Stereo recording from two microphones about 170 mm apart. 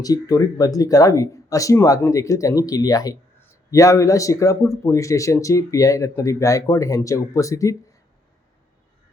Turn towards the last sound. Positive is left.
turn(degrees=20)  # may be behind; listen again after turning